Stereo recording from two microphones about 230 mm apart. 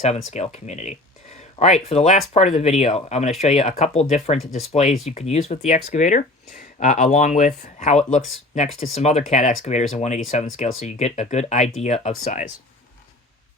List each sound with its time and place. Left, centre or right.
0.0 s speech: left